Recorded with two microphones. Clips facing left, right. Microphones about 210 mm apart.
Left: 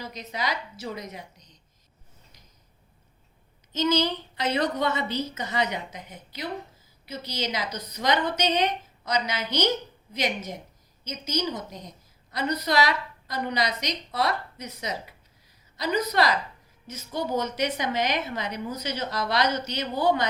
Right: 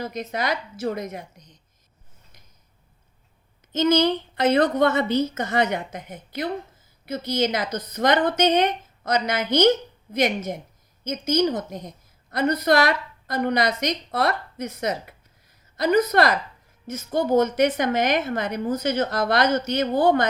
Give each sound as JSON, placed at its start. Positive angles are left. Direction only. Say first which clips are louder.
{"t": 0.0, "sound": "a woman's voice", "louder": "right 5 dB", "side_deg": -50}
{"t": 3.7, "sound": "a woman's voice", "louder": "right 5 dB", "side_deg": -55}